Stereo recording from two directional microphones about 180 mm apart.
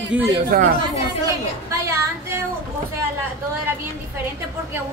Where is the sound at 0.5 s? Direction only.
55° right (ahead or behind).